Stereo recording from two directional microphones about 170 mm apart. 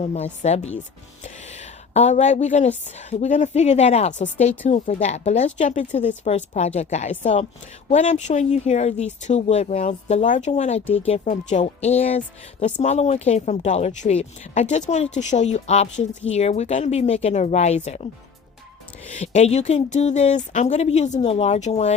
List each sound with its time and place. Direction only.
0.0 s a woman's voice: 40° left (ahead or behind)
19.1 s a woman's voice: 40° left (ahead or behind)